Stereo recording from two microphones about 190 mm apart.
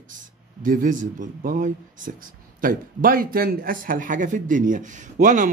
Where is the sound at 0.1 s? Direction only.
45° right (ahead or behind).